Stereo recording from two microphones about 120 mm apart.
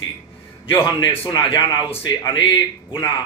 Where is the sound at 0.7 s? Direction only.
45° left (ahead or behind).